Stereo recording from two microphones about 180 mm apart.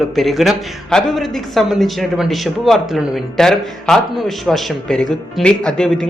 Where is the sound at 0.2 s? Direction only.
Centre (ahead or behind).